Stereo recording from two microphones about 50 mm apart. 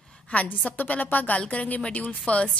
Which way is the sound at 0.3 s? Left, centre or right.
Left.